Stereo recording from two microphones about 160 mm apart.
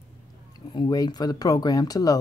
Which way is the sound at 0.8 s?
25° left (ahead or behind).